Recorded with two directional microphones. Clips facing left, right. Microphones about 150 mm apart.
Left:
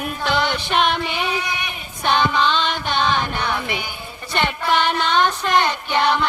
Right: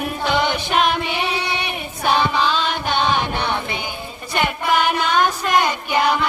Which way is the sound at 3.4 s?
25° right (ahead or behind).